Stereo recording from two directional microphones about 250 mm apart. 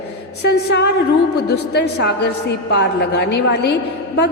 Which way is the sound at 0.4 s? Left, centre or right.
Left.